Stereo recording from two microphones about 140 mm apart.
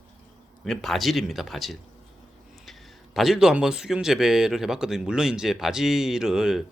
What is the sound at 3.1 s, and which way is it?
Speech, 5° right (ahead or behind).